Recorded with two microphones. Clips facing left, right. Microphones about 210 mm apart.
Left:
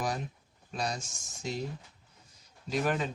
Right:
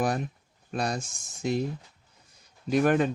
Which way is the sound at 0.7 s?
55° right (ahead or behind).